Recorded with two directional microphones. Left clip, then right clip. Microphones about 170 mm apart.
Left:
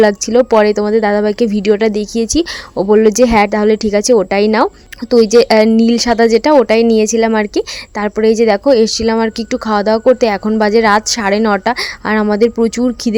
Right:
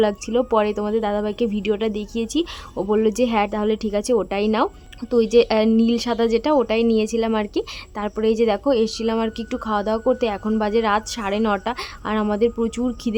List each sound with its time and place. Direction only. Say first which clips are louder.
0.0 s speech: left 10 dB; 30° left (ahead or behind)